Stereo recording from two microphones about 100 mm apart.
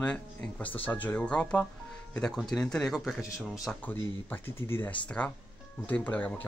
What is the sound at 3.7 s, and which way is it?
Speech, 20° left (ahead or behind).